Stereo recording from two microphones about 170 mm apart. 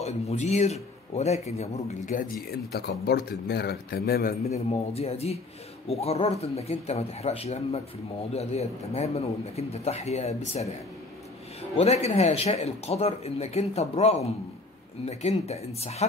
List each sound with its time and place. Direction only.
0.0 s speech: 40° left (ahead or behind)
2.7 s a man's voice: 70° left (ahead or behind)
4.5 s speech: 35° left (ahead or behind)
11.7 s speech: 40° left (ahead or behind)